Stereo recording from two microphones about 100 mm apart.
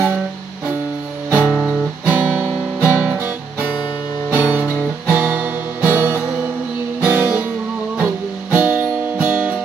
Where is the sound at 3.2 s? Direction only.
15° right (ahead or behind).